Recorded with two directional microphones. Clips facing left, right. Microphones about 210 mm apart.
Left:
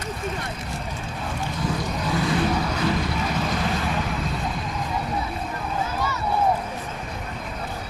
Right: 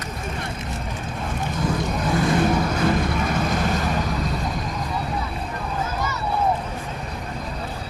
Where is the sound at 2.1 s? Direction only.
50° right (ahead or behind).